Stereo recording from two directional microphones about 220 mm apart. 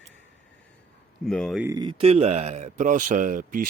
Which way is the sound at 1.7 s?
20° right (ahead or behind).